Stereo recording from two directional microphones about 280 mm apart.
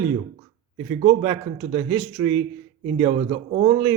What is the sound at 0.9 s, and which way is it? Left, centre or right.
Speech, centre.